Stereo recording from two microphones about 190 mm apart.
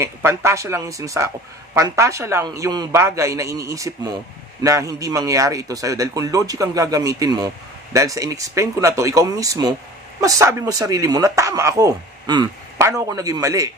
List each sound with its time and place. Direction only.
0.0 s speech: 15° right (ahead or behind)